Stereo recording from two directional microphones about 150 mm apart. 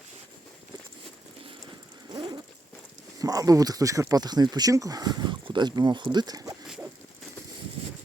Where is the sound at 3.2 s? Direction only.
25° right (ahead or behind).